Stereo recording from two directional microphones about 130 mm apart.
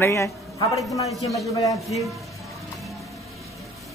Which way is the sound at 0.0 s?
20° left (ahead or behind).